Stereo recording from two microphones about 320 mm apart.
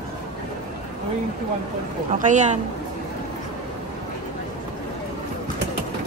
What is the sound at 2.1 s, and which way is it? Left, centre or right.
Speech, right.